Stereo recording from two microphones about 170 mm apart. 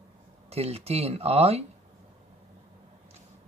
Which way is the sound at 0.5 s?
35° right (ahead or behind).